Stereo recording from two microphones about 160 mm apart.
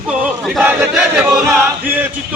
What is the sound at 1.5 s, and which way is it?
Speech, 10° right (ahead or behind).